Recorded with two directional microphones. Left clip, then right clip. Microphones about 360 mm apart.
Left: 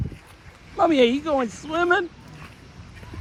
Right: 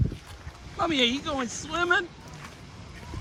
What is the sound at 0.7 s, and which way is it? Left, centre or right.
Speech, centre.